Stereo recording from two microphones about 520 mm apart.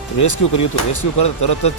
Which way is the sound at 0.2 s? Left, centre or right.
Left.